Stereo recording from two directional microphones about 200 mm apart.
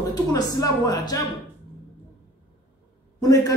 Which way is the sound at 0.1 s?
20° left (ahead or behind).